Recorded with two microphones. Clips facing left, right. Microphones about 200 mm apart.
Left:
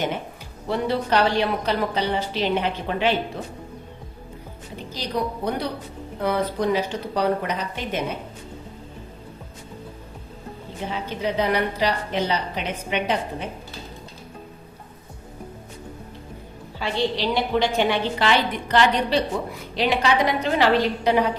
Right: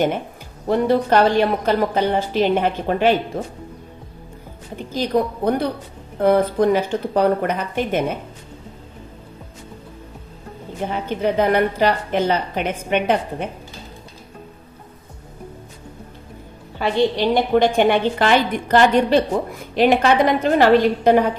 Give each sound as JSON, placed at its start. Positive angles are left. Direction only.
{"t": 0.7, "sound": "a woman's voice", "side_deg": -50}
{"t": 4.9, "sound": "a woman's voice", "side_deg": -50}
{"t": 10.9, "sound": "a woman's voice", "side_deg": -55}
{"t": 16.7, "sound": "a woman's voice", "side_deg": -50}